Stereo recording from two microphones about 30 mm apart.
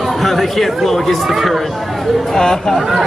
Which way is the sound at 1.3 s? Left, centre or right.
Centre.